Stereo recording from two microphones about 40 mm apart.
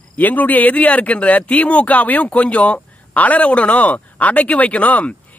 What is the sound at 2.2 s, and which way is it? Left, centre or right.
Speech, left.